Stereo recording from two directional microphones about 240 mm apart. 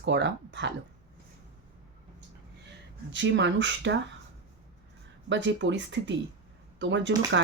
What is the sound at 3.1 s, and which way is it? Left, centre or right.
Speech, right.